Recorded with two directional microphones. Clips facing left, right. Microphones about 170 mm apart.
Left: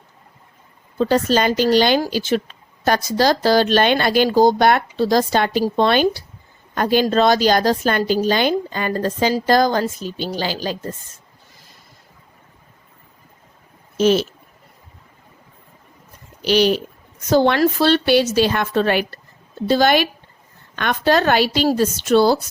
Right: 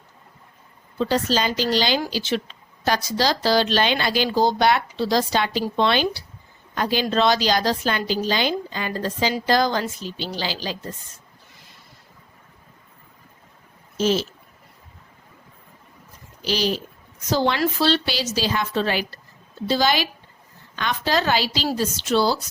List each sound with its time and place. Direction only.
0.9 s speech: 50° left (ahead or behind)
13.9 s a sound: 65° left (ahead or behind)
16.4 s a woman's voice: 65° left (ahead or behind)